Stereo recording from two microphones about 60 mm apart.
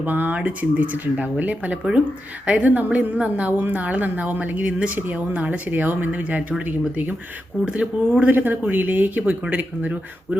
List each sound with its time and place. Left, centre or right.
0.0 s a woman's voice: right
7.6 s a woman's voice: centre
8.3 s a woman's voice: right